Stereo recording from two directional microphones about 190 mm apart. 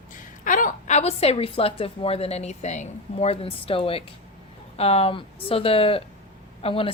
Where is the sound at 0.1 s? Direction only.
45° left (ahead or behind).